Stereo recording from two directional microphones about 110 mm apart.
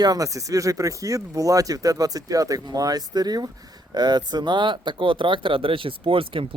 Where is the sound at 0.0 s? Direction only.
35° right (ahead or behind).